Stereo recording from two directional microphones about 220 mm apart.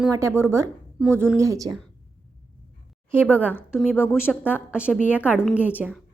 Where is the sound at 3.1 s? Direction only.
10° right (ahead or behind).